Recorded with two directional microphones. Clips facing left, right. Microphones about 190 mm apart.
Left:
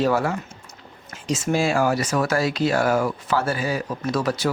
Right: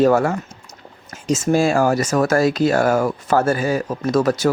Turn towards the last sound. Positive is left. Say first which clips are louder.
# right 6 dB
turn(degrees=-45)  # may be behind; listen again after turning